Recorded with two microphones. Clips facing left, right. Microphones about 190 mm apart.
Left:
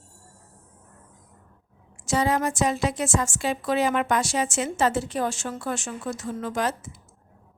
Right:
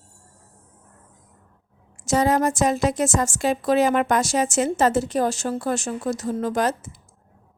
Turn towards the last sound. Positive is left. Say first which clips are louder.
# right 5 dB
turn(degrees=-40)  # may be behind; listen again after turning